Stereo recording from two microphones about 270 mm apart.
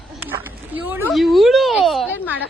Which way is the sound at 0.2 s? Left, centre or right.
Centre.